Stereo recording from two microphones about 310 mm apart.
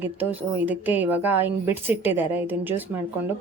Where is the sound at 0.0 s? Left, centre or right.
Centre.